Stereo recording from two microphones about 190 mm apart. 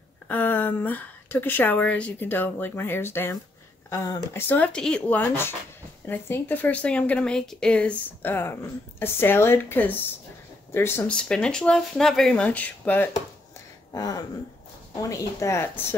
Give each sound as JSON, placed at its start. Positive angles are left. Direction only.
{"t": 0.3, "sound": "a woman's voice", "side_deg": 10}
{"t": 13.9, "sound": "a sound", "side_deg": 20}
{"t": 15.0, "sound": "a woman's voice", "side_deg": 15}